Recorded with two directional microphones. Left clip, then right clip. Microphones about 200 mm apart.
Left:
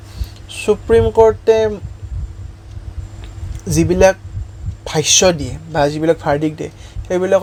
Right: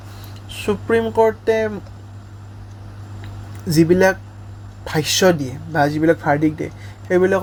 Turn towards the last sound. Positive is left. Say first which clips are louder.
# left 2 dB
turn(degrees=20)  # may be behind; listen again after turning